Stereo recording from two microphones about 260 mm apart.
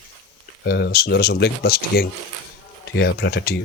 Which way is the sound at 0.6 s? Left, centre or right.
Left.